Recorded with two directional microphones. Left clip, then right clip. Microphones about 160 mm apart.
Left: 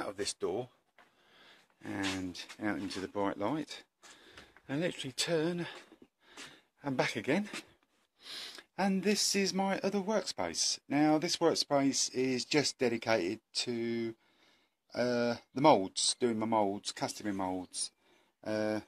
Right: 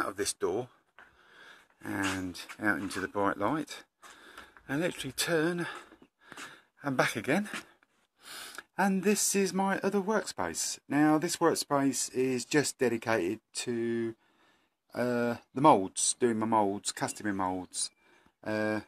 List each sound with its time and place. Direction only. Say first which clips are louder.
0.0 s speech: right 4 dB; centre (ahead or behind)
1.3 s a sound: right 5 dB; 5° left (ahead or behind)
2.0 s speech: right 3 dB; 10° left (ahead or behind)